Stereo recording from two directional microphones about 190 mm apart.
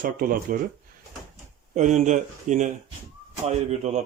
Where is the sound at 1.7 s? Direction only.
40° right (ahead or behind).